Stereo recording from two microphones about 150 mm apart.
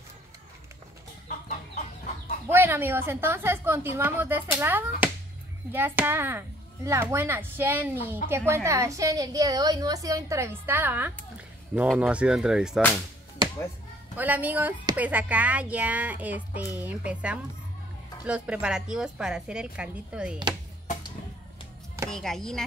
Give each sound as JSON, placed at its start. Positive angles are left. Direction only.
{"t": 2.4, "sound": "a woman's voice", "side_deg": -15}
{"t": 14.1, "sound": "a woman's voice", "side_deg": -10}
{"t": 22.1, "sound": "a woman's voice", "side_deg": 5}